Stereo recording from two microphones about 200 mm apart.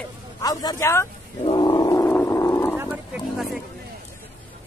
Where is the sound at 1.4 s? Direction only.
20° left (ahead or behind).